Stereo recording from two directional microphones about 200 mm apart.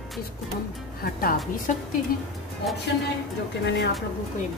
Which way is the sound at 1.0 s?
45° left (ahead or behind).